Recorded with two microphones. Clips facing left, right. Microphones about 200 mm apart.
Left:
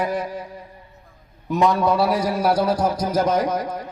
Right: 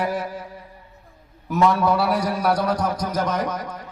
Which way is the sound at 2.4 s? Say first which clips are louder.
Left 3 dB; 25° left (ahead or behind).